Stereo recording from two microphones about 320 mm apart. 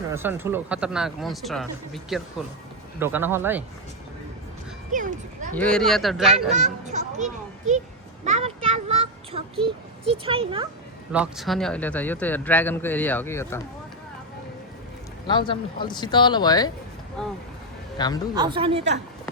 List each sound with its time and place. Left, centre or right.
0.1 s speech: centre
4.9 s speech: right
5.5 s speech: centre
6.5 s a child's voice: right
8.2 s a sound: centre
9.6 s speech: centre
11.1 s speech: centre
15.3 s speech: centre
17.9 s speech: centre
18.3 s speech: centre